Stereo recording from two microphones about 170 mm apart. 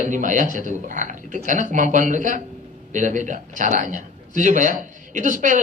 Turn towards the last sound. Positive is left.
turn(degrees=-50)  # may be behind; listen again after turning